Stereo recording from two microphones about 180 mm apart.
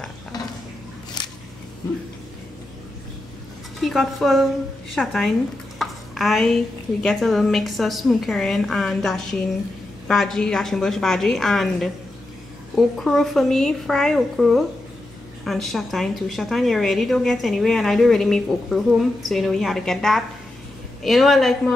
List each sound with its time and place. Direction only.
3.8 s a woman's voice: centre (ahead or behind)